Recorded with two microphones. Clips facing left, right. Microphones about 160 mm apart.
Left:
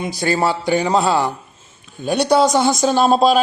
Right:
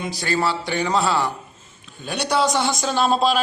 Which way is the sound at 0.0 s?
50° left (ahead or behind).